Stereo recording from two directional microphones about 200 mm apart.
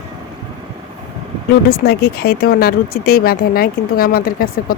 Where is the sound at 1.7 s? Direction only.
50° left (ahead or behind).